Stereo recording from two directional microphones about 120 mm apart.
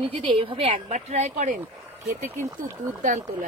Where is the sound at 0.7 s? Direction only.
75° right (ahead or behind).